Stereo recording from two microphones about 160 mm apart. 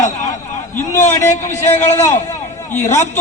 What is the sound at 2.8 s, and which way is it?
Speech, 45° left (ahead or behind).